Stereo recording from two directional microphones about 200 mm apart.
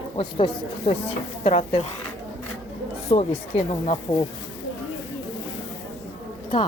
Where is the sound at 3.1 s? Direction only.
30° left (ahead or behind).